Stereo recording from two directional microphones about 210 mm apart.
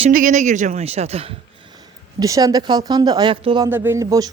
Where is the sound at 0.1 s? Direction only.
40° right (ahead or behind).